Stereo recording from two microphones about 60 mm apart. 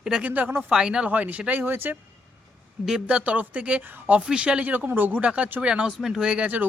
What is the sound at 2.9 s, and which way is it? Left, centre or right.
Speech, centre.